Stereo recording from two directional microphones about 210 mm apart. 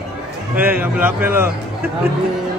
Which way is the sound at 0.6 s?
10° right (ahead or behind).